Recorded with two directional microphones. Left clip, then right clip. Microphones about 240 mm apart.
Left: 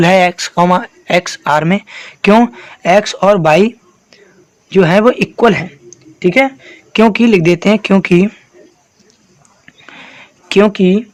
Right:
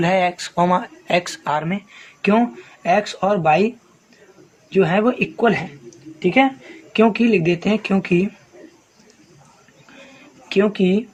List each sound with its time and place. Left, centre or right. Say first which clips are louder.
0.0 s speech: left 9 dB; left
4.7 s speech: left 8 dB; left
10.5 s speech: left 8 dB; left